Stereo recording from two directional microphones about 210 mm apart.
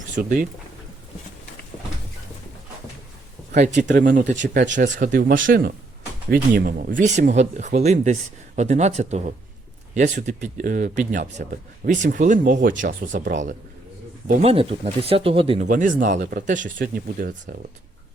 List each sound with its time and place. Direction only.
0.2 s speech: 45° right (ahead or behind)
3.5 s speech: 35° right (ahead or behind)
14.4 s speech: 25° right (ahead or behind)
15.7 s speech: 40° right (ahead or behind)